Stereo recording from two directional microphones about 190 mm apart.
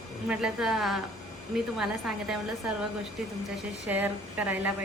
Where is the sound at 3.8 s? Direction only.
5° right (ahead or behind).